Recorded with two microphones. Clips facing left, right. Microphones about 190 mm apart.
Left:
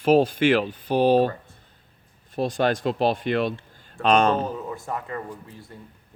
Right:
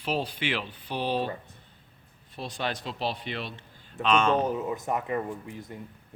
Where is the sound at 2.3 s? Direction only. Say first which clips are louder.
Left 10 dB; 45° left (ahead or behind).